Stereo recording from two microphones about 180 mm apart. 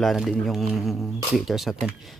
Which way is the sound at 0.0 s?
Centre (ahead or behind).